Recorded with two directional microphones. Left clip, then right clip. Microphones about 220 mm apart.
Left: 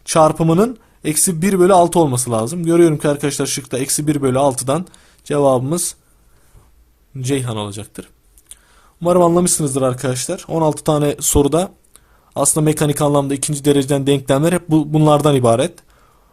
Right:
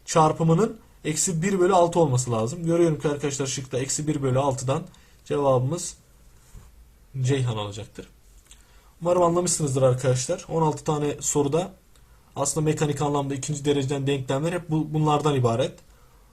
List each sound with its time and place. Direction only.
0.0 s speech: 50° left (ahead or behind)
7.2 s speech: 45° left (ahead or behind)